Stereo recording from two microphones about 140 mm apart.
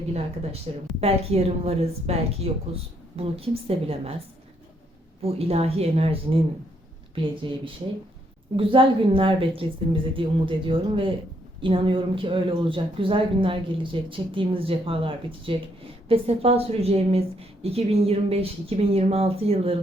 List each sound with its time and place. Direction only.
0.7 s a woman's voice: 45° right (ahead or behind)
5.2 s a woman's voice: 45° right (ahead or behind)
7.4 s a woman's voice: 40° right (ahead or behind)